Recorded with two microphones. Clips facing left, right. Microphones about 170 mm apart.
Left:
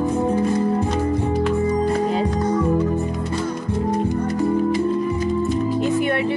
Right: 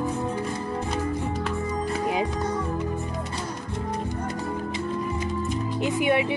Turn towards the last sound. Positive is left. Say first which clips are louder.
# left 3 dB
turn(degrees=-15)  # may be behind; listen again after turning